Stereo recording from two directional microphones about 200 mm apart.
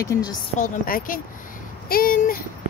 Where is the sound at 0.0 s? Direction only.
20° left (ahead or behind).